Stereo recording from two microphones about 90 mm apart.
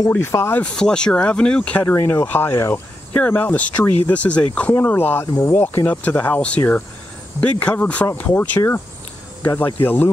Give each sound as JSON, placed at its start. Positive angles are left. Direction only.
{"t": 0.1, "sound": "speech", "side_deg": 30}
{"t": 0.6, "sound": "speech", "side_deg": 10}
{"t": 5.4, "sound": "speech", "side_deg": 40}
{"t": 5.9, "sound": "speech", "side_deg": 20}